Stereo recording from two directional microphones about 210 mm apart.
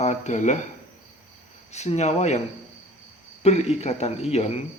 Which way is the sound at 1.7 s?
30° left (ahead or behind).